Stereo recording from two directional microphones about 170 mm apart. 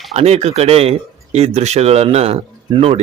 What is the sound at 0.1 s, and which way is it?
Speech, 40° right (ahead or behind).